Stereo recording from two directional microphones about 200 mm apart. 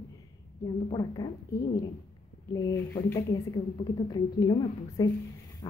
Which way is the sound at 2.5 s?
15° left (ahead or behind).